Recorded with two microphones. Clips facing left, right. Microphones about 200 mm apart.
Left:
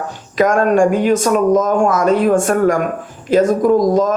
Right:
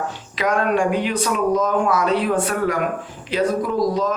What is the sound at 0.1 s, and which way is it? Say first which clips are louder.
Speech: left 7 dB; 45° left (ahead or behind).